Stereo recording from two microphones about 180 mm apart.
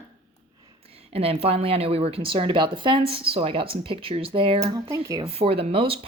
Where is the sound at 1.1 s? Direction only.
35° right (ahead or behind).